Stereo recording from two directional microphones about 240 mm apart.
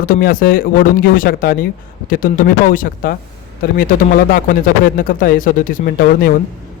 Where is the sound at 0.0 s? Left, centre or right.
Left.